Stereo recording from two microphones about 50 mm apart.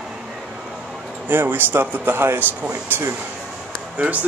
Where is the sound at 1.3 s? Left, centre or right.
Right.